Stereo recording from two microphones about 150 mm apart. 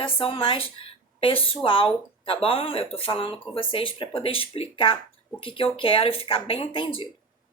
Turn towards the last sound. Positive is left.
turn(degrees=35)  # may be behind; listen again after turning